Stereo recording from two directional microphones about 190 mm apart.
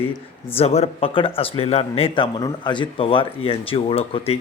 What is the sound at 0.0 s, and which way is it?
Speech, 30° left (ahead or behind).